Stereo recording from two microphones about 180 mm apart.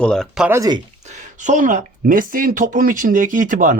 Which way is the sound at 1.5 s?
45° right (ahead or behind).